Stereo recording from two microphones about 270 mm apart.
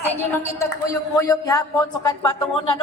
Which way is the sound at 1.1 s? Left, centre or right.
Centre.